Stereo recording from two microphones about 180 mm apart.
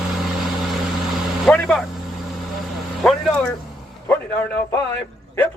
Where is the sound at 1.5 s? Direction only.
5° left (ahead or behind).